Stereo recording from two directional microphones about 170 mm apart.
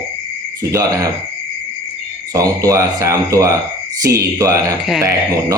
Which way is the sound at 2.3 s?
20° right (ahead or behind).